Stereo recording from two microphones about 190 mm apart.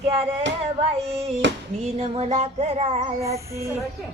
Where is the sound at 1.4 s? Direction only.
70° right (ahead or behind).